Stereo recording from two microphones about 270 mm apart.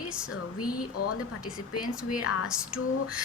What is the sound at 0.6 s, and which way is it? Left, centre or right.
Speech, left.